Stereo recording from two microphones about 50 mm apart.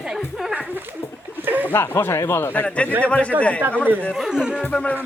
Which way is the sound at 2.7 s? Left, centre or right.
Left.